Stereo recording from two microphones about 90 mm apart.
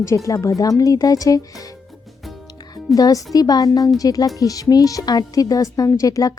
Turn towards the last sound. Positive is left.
turn(degrees=40)  # may be behind; listen again after turning